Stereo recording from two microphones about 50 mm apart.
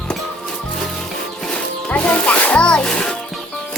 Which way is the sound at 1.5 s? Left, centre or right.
Left.